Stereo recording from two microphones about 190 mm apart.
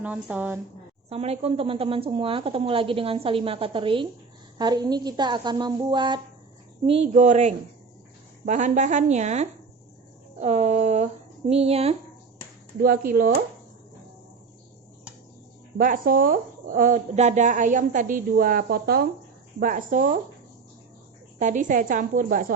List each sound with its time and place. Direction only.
0.0 s a woman's voice: 5° right (ahead or behind)
1.1 s a woman's voice: 30° right (ahead or behind)
12.8 s speech: 50° right (ahead or behind)
15.8 s speech: 45° right (ahead or behind)
21.3 s speech: 40° right (ahead or behind)